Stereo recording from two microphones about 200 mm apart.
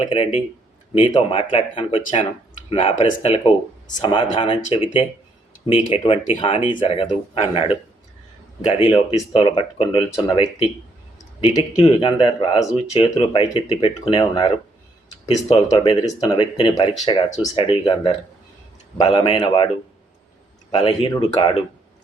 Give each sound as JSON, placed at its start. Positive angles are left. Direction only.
{"t": 0.0, "sound": "speech", "side_deg": 30}
{"t": 8.8, "sound": "speech", "side_deg": 25}
{"t": 20.7, "sound": "speech", "side_deg": 25}